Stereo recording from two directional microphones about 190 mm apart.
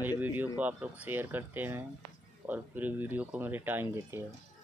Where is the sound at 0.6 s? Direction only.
10° right (ahead or behind).